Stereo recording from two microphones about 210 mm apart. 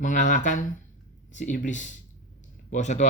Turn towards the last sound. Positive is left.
turn(degrees=35)  # may be behind; listen again after turning